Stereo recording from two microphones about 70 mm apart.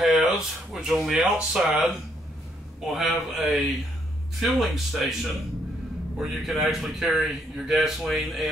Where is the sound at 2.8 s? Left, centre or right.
Centre.